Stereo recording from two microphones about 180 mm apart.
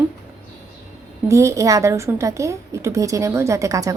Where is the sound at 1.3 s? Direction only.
15° right (ahead or behind).